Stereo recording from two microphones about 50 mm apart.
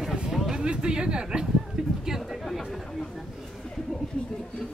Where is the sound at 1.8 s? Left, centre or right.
Centre.